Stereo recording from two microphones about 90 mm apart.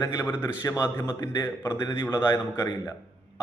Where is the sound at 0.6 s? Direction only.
40° left (ahead or behind).